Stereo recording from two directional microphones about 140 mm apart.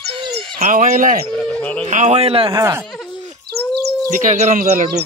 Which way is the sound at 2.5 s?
20° right (ahead or behind).